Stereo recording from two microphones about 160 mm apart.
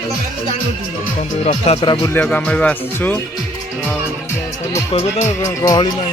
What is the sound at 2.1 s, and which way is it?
Speech, 10° left (ahead or behind).